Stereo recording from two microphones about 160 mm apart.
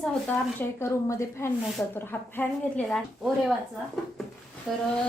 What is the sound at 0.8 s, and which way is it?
A woman's voice, 20° left (ahead or behind).